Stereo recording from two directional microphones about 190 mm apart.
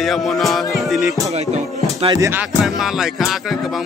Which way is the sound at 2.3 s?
5° right (ahead or behind).